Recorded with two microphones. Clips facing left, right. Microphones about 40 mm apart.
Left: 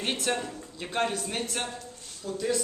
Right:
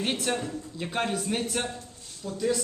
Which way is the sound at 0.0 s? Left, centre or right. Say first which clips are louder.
Right 1 dB; centre.